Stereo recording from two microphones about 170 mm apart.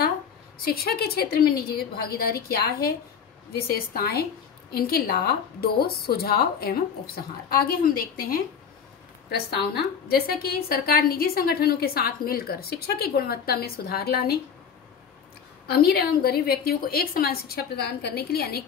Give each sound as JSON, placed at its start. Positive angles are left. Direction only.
{"t": 0.7, "sound": "a woman's voice", "side_deg": 65}
{"t": 9.3, "sound": "a woman's voice", "side_deg": 70}
{"t": 15.6, "sound": "a woman's voice", "side_deg": 65}